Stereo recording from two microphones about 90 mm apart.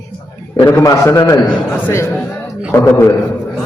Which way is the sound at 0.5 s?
50° left (ahead or behind).